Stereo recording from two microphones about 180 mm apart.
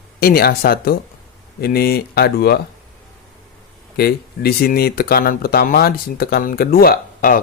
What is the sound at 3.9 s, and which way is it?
Speech, 60° left (ahead or behind).